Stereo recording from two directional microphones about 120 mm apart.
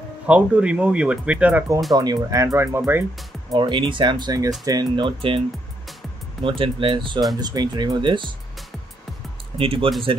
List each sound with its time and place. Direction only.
0.3 s speech: 10° right (ahead or behind)
2.0 s speech: 30° right (ahead or behind)
3.5 s speech: 40° right (ahead or behind)
6.4 s speech: 45° right (ahead or behind)
9.6 s speech: 50° right (ahead or behind)